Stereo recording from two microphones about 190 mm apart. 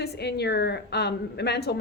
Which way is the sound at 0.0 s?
60° left (ahead or behind).